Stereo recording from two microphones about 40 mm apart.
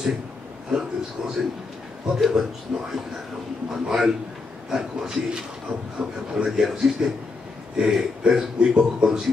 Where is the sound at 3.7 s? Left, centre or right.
Centre.